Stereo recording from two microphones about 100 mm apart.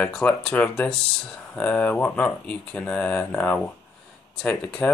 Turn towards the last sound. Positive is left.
turn(degrees=10)  # may be behind; listen again after turning